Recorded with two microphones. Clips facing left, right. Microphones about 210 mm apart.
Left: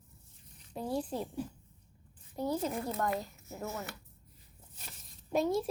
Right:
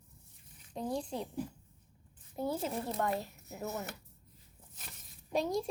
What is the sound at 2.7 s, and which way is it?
Speech, 25° right (ahead or behind).